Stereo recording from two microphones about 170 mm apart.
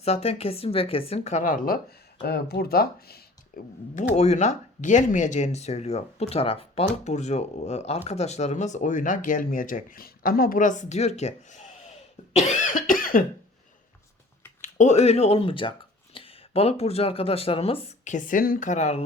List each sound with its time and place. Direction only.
0.0 s speech: 35° left (ahead or behind); by 1.8 s 55° left (ahead or behind)
2.2 s speech: 70° left (ahead or behind)
4.1 s speech: 40° left (ahead or behind)
14.6 s speech: 45° left (ahead or behind)